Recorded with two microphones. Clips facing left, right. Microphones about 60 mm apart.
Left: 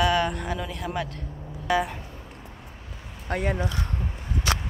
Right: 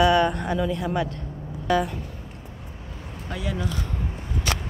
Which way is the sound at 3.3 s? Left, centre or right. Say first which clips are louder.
Left 3 dB; left.